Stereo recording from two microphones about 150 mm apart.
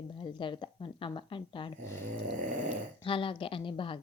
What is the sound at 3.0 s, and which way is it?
Speech, 35° left (ahead or behind).